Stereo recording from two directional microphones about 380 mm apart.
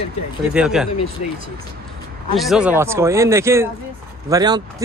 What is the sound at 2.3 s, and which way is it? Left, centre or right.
Speech, centre.